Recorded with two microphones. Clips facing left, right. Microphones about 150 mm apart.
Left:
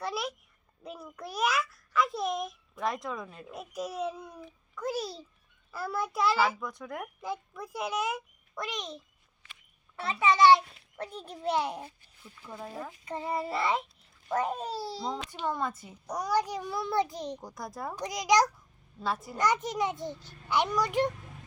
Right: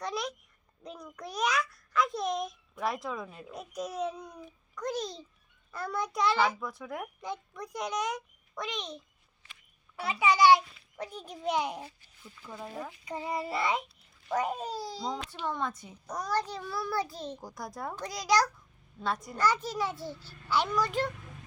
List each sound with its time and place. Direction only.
0.0 s a sound: 5° left (ahead or behind)
0.9 s a child's voice: 5° left (ahead or behind)
10.0 s a child's voice: 5° right (ahead or behind)
11.1 s a child's voice: 30° left (ahead or behind)
11.5 s a child's voice: 5° right (ahead or behind); by 17.4 s 15° left (ahead or behind)
17.4 s a child's voice: centre (ahead or behind)
17.9 s a child's voice: 20° left (ahead or behind)
18.9 s a child's voice: 5° left (ahead or behind)
19.4 s a child's voice: 20° left (ahead or behind)